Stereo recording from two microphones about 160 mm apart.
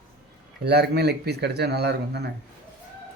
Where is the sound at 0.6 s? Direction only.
90° right.